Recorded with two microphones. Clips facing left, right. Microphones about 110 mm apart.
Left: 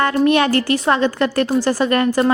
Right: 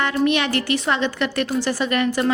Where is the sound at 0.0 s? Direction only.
40° left (ahead or behind).